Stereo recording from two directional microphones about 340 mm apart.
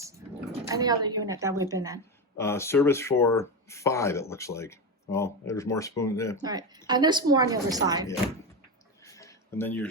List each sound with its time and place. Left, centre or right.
0.7 s a woman's voice: centre
2.4 s speech: centre
6.3 s a woman's voice: centre
9.0 s a sound: centre